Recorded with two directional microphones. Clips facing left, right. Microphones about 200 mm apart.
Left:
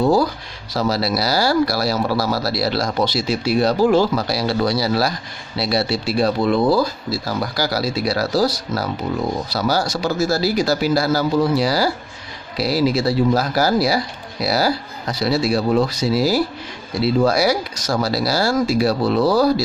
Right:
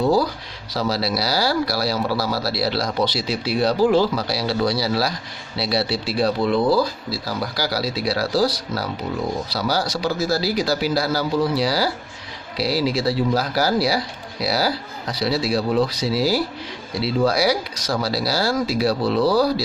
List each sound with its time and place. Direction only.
0.7 s speech: 50° left (ahead or behind)